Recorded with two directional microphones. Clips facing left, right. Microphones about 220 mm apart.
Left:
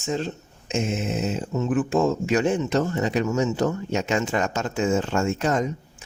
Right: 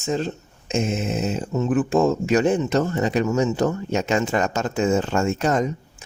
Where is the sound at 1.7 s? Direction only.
35° right (ahead or behind).